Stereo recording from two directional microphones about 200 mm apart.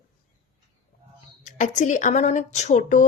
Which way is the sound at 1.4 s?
40° left (ahead or behind).